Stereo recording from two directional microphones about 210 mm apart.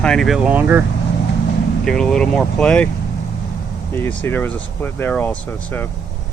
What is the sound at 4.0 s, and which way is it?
Speech, 10° left (ahead or behind).